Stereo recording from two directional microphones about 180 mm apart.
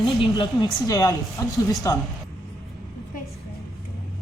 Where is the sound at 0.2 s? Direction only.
25° left (ahead or behind).